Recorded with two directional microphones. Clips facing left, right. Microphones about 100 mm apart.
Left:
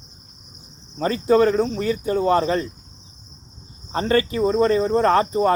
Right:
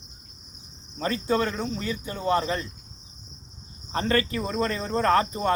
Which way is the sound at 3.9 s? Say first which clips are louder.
Left 5 dB; 25° left (ahead or behind).